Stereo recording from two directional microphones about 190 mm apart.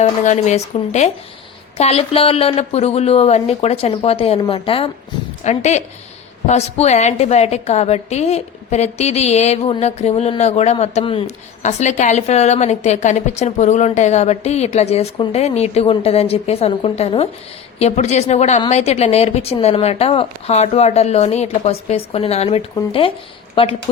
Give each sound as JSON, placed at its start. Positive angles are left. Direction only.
{"t": 0.0, "sound": "a woman's voice", "side_deg": 35}